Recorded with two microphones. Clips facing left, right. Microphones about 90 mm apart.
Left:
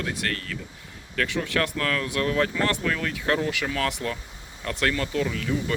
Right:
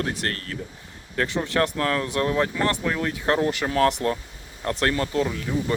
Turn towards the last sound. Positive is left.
turn(degrees=-20)  # may be behind; listen again after turning